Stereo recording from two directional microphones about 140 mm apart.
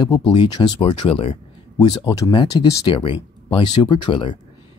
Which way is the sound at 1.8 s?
30° left (ahead or behind).